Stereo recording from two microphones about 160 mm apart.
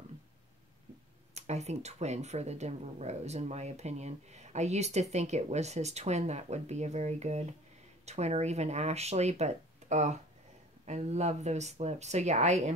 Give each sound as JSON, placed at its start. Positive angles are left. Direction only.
{"t": 1.3, "sound": "speech", "side_deg": -45}